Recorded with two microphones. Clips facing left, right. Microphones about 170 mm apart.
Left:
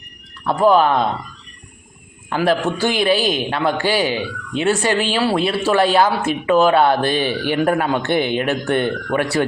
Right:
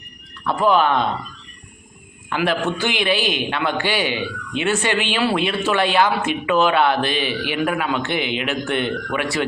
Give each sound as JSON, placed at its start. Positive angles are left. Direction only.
{"t": 0.4, "sound": "a man's voice", "side_deg": 35}
{"t": 2.3, "sound": "a man's voice", "side_deg": 35}